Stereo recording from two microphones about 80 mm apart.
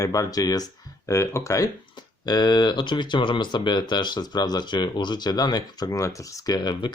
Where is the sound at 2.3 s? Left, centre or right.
Left.